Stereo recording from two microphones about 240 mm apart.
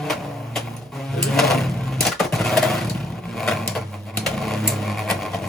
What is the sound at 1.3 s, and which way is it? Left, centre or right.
Drawer open or close, centre.